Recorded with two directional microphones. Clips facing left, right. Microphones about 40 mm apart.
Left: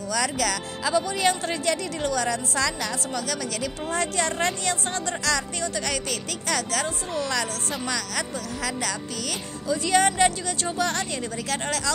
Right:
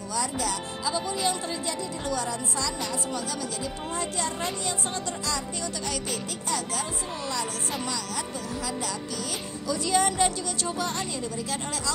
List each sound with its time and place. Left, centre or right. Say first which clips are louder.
0.1 s speech: left 4 dB; left
3.3 s speech: left 3 dB; left
9.7 s a woman's voice: left 4 dB; left